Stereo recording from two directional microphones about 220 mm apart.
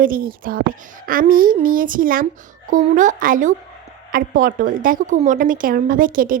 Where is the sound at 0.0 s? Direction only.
40° right (ahead or behind).